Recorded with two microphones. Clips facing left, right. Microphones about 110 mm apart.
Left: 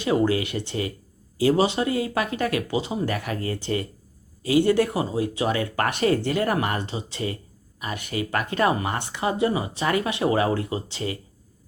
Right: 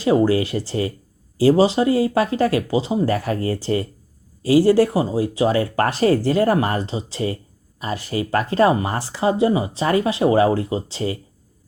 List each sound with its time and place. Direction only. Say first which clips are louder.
0.0 s speech: right 5 dB; 35° right (ahead or behind)